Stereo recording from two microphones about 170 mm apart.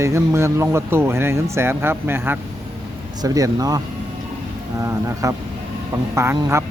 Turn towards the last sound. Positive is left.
turn(degrees=-15)  # may be behind; listen again after turning